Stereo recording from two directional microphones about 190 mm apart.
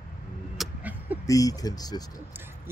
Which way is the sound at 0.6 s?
10° right (ahead or behind).